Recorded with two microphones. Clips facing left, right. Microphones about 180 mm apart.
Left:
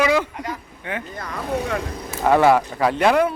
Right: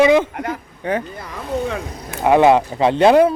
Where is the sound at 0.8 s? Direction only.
40° right (ahead or behind).